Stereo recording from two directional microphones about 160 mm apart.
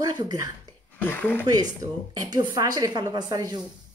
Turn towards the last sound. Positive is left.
turn(degrees=-25)  # may be behind; listen again after turning